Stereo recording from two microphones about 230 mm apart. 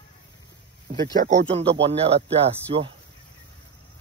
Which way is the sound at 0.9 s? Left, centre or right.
Right.